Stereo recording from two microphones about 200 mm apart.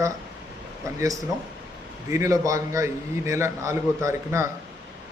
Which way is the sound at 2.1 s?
15° right (ahead or behind).